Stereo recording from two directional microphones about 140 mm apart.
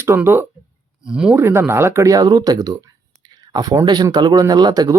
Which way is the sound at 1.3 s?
20° right (ahead or behind).